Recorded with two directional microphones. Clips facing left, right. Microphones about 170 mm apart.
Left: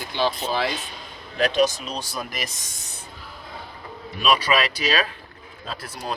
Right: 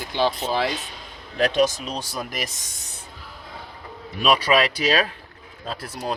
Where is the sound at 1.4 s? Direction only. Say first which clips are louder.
Right 1 dB; 50° right (ahead or behind).